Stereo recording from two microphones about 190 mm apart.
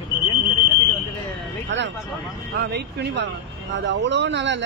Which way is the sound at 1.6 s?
70° right (ahead or behind).